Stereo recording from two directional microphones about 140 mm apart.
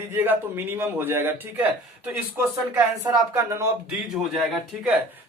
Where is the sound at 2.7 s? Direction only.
20° right (ahead or behind).